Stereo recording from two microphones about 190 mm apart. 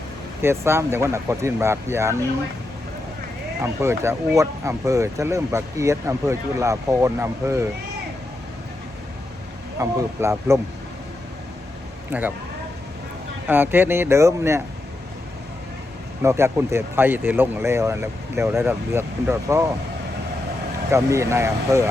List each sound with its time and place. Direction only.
0.4 s speech: 15° right (ahead or behind)
3.6 s speech: 15° right (ahead or behind)
9.7 s speech: 15° right (ahead or behind)
12.1 s speech: 10° right (ahead or behind)
13.5 s speech: 10° right (ahead or behind)
16.2 s speech: 15° right (ahead or behind)
20.9 s speech: 15° right (ahead or behind)